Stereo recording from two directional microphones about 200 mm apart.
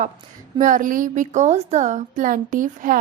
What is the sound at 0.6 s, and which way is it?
A woman's voice, 40° right (ahead or behind).